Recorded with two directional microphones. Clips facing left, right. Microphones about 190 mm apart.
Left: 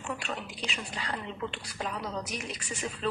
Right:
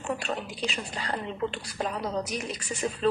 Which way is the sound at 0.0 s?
40° right (ahead or behind).